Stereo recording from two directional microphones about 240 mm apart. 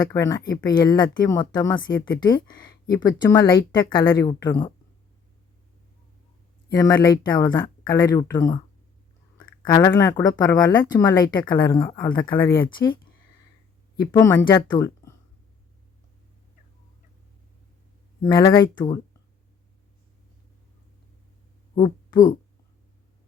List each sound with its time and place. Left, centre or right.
0.1 s speech: centre
6.7 s speech: centre
9.6 s speech: centre
14.1 s speech: centre
18.2 s speech: centre
21.8 s speech: centre